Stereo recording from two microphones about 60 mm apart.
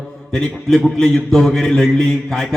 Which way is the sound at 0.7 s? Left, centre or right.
Centre.